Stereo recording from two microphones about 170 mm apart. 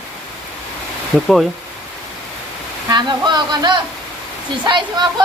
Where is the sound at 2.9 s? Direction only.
25° right (ahead or behind).